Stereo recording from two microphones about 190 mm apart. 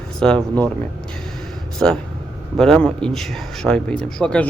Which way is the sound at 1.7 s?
Centre (ahead or behind).